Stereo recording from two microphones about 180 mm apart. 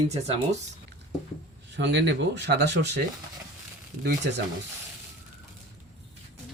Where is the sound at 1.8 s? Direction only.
70° right (ahead or behind).